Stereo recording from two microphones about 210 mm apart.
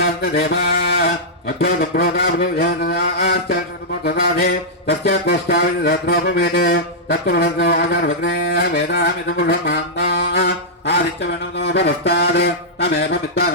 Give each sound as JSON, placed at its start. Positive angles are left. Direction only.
{"t": 0.0, "sound": "mantra", "side_deg": 50}